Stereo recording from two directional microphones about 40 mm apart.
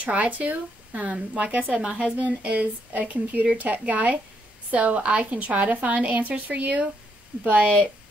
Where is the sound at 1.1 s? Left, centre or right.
Right.